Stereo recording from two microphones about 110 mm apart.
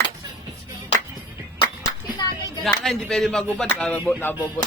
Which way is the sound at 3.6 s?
10° left (ahead or behind).